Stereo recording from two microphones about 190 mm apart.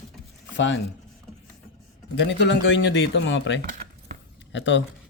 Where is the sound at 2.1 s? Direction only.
70° left (ahead or behind).